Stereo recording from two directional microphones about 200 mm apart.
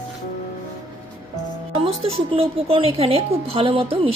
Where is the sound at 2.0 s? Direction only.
30° right (ahead or behind).